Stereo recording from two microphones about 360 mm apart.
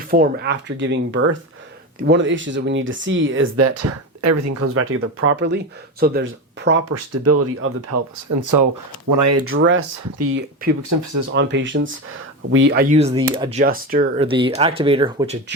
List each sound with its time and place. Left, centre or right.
0.1 s speech: right
6.9 s speech: right
9.4 s speech: right
10.8 s speech: right
11.3 s speech: right; by 15.4 s centre